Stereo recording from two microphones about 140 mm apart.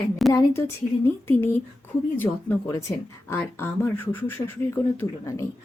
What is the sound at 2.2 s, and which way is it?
A woman's voice, 15° left (ahead or behind).